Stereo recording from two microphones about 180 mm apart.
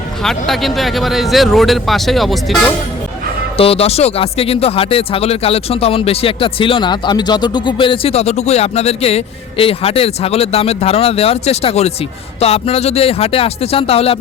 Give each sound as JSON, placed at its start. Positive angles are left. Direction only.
{"t": 0.2, "sound": "speech", "side_deg": 0}
{"t": 3.6, "sound": "speech", "side_deg": 35}